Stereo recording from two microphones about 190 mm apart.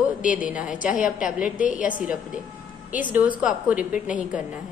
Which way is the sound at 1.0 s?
45° left (ahead or behind).